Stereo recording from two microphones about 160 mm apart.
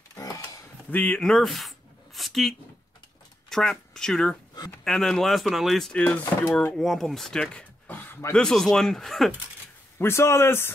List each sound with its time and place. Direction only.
0.1 s a sound: 20° left (ahead or behind)
0.8 s speech: 10° left (ahead or behind)
2.1 s a sound: centre (ahead or behind)
3.4 s speech: 5° left (ahead or behind)
6.5 s speech: 5° left (ahead or behind)
9.9 s a man's voice: 15° left (ahead or behind)